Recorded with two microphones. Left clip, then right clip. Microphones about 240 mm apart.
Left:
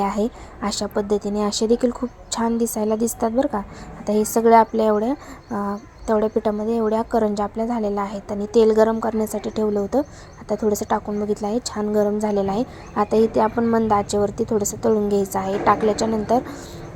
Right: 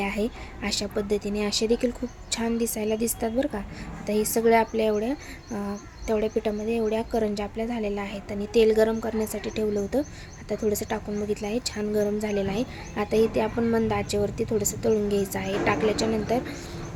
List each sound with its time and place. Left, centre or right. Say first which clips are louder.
0.0 s a woman's voice: left 6 dB; centre